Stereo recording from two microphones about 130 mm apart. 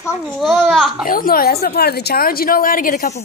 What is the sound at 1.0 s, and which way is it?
A woman's voice, 90° left.